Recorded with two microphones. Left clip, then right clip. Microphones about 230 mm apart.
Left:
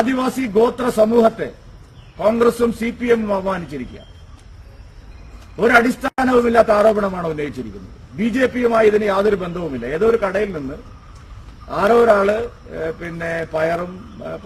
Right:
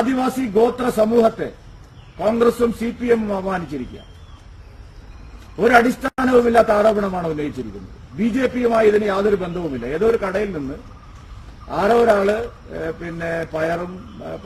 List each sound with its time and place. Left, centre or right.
0.0 s a man's voice: centre
5.5 s a man's voice: centre
11.8 s a man's voice: centre
12.8 s mantra: centre
13.2 s a man's voice: centre